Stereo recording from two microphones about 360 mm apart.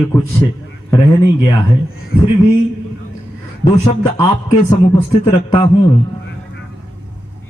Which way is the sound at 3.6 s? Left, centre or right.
Centre.